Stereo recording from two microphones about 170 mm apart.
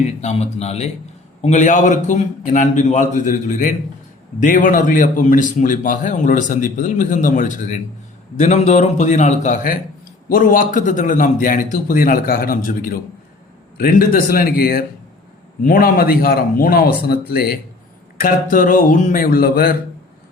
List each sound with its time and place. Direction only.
0.0 s a man's voice: 40° left (ahead or behind); by 17.6 s 65° left (ahead or behind)
18.2 s a man's voice: 55° left (ahead or behind)